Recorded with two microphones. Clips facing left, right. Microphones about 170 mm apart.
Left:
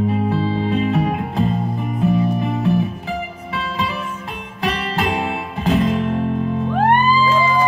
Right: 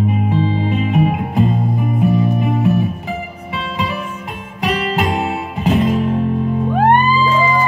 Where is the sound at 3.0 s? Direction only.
20° right (ahead or behind).